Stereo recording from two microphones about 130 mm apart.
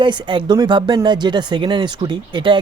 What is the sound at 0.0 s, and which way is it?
Speech, 40° right (ahead or behind).